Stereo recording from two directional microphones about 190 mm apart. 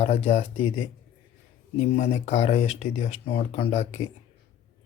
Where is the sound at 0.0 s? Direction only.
35° left (ahead or behind).